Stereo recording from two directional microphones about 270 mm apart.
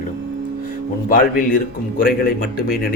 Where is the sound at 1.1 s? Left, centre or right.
Left.